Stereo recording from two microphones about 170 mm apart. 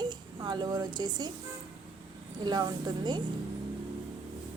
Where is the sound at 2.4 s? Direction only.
25° right (ahead or behind).